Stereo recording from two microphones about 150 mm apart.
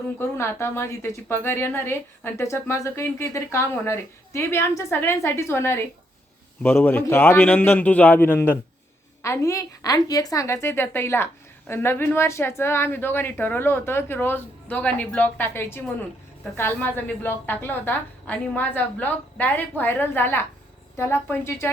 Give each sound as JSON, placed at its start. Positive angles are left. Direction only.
{"t": 0.2, "sound": "a woman's voice", "side_deg": 15}